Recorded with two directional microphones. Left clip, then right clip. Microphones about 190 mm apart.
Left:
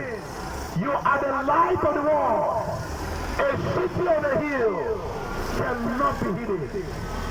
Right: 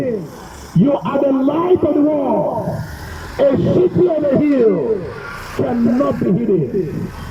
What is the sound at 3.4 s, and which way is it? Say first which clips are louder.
Speech: right 11 dB; 45° right (ahead or behind).